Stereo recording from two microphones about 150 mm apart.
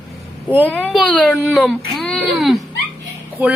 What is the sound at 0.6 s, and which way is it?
A woman's voice, 10° left (ahead or behind).